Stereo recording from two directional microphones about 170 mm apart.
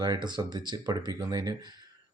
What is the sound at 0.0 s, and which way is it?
Speech, 25° right (ahead or behind).